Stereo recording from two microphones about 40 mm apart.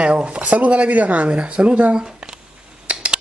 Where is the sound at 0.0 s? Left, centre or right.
Right.